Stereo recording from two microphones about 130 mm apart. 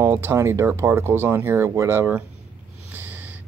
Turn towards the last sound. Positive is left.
turn(degrees=-15)  # may be behind; listen again after turning